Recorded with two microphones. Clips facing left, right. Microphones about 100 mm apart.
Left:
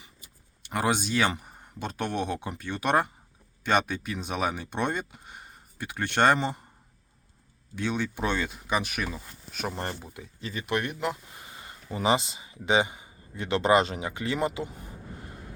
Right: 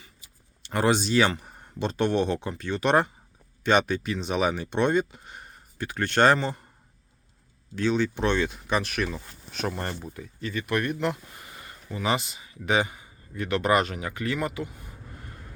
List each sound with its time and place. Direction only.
0.7 s speech: 5° left (ahead or behind)
7.8 s speech: 10° left (ahead or behind)
9.7 s a man's voice: 20° left (ahead or behind)
11.9 s a man's voice: 30° left (ahead or behind)